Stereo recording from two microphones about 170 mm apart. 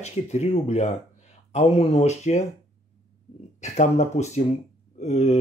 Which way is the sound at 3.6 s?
45° left (ahead or behind).